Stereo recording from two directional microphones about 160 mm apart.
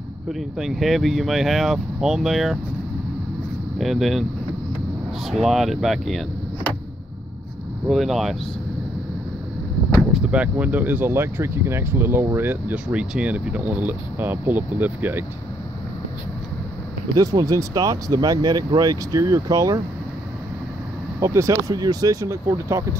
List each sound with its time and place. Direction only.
0.3 s speech: centre (ahead or behind)
3.7 s speech: centre (ahead or behind)
7.9 s speech: centre (ahead or behind)
10.1 s speech: 5° right (ahead or behind)
17.1 s speech: 20° right (ahead or behind)
21.2 s speech: 20° right (ahead or behind)